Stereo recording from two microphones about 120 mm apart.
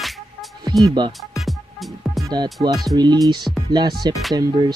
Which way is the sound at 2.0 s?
Centre (ahead or behind).